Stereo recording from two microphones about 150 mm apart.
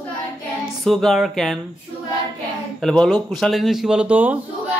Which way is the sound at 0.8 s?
Centre (ahead or behind).